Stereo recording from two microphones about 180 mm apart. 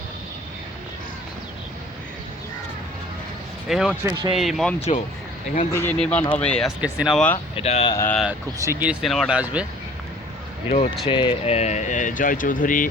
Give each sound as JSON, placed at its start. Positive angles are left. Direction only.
{"t": 3.7, "sound": "speech", "side_deg": 0}
{"t": 4.0, "sound": "speech", "side_deg": -20}
{"t": 4.4, "sound": "speech", "side_deg": 0}
{"t": 5.7, "sound": "speech", "side_deg": 10}
{"t": 7.5, "sound": "speech", "side_deg": 35}
{"t": 7.9, "sound": "speech", "side_deg": 10}
{"t": 8.5, "sound": "speech", "side_deg": -15}
{"t": 11.0, "sound": "speech", "side_deg": 25}